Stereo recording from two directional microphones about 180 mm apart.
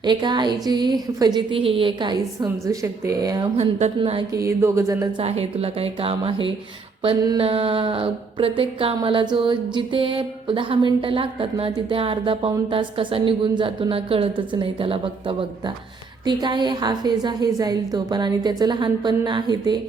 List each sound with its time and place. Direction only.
0.0 s speech: 25° right (ahead or behind)
3.6 s a woman's voice: 35° right (ahead or behind)
4.4 s speech: 15° right (ahead or behind)
5.1 s a woman's voice: 35° right (ahead or behind)